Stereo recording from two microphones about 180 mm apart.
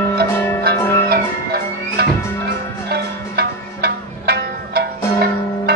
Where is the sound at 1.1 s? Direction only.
60° right (ahead or behind).